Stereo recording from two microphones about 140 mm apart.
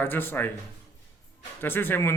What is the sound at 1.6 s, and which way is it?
Speech, 15° left (ahead or behind).